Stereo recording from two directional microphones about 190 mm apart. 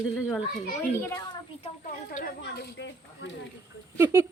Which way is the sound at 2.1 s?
55° left (ahead or behind).